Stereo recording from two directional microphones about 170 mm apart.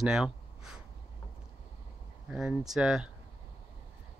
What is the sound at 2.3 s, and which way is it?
Speech, centre (ahead or behind).